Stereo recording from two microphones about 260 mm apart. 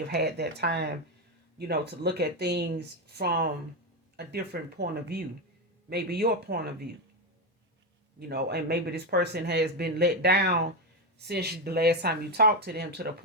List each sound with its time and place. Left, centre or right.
0.1 s speech: right
8.3 s speech: right